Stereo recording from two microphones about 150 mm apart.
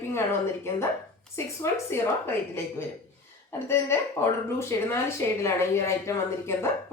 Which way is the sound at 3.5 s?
15° left (ahead or behind).